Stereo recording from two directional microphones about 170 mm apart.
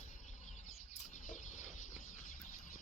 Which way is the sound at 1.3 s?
45° left (ahead or behind).